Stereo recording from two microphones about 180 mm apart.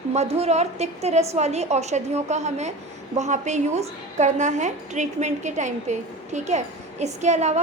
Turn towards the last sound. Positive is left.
turn(degrees=-40)  # may be behind; listen again after turning